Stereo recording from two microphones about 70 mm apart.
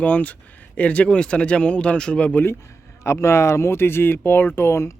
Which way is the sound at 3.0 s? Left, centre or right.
Left.